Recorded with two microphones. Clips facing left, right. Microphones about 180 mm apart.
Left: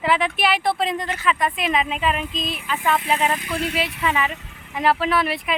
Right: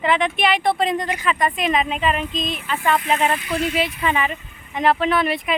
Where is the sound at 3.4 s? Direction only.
55° left (ahead or behind).